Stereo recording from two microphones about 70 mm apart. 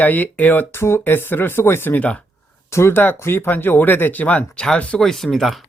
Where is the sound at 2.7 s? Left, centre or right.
Left; by 5.6 s centre.